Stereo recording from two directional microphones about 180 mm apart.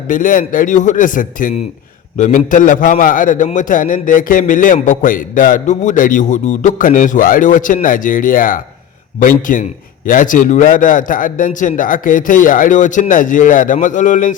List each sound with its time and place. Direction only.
0.1 s a man's voice: 50° left (ahead or behind)